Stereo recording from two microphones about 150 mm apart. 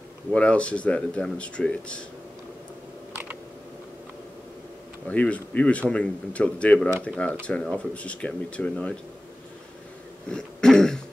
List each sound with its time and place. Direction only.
0.3 s speech: 10° left (ahead or behind)
5.0 s speech: 10° left (ahead or behind)
10.3 s throat clearing: 5° left (ahead or behind)